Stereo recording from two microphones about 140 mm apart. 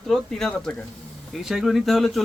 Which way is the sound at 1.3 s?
Centre (ahead or behind).